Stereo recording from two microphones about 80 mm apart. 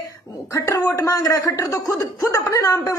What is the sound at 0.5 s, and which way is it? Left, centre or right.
A woman's voice, left.